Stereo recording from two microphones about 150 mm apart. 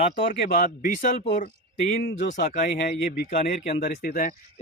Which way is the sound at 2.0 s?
55° left (ahead or behind).